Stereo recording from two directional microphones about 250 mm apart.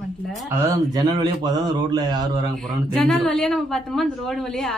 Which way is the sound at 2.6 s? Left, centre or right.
Centre.